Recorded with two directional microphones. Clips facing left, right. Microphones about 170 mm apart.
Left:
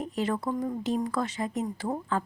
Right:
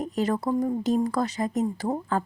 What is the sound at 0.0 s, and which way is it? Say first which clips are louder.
A woman's voice: right 3 dB; 40° right (ahead or behind).